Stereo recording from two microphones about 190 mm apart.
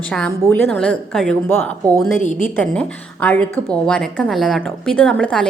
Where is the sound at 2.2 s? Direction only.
40° left (ahead or behind).